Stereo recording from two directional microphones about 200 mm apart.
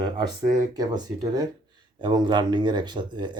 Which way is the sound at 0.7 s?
20° right (ahead or behind).